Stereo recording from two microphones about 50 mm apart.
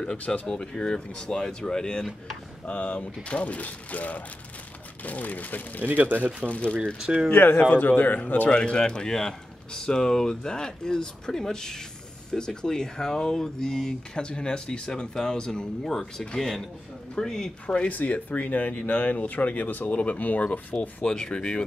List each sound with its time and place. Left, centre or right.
0.3 s speech: centre
2.6 s speech: left
5.9 s speech: right
6.4 s speech: left
7.0 s speech: centre
7.2 s speech: left
8.5 s a man's voice: left
17.6 s speech: left
21.0 s speech: centre